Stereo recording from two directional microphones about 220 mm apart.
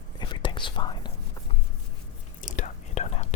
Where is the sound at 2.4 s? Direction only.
35° left (ahead or behind).